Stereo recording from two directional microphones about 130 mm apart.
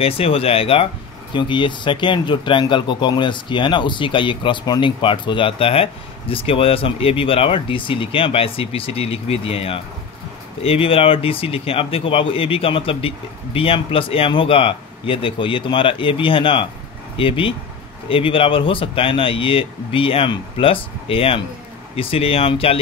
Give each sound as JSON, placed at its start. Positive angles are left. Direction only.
{"t": 0.0, "sound": "speech", "side_deg": 45}